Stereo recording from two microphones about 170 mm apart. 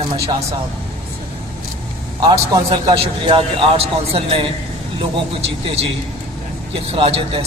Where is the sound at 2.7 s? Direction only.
25° right (ahead or behind).